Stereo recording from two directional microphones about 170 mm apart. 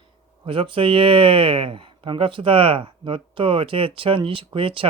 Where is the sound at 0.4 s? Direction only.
30° right (ahead or behind).